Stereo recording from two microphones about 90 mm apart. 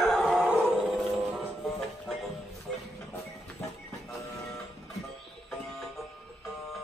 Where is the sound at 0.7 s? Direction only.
Centre (ahead or behind).